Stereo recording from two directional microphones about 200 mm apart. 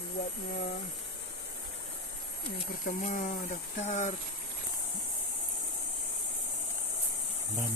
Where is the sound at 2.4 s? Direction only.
45° left (ahead or behind).